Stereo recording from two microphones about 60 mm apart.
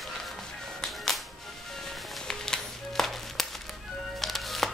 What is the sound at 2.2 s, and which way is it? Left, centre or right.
Music, centre.